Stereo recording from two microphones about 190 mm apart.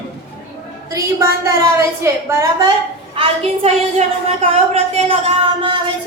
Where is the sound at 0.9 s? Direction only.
15° right (ahead or behind).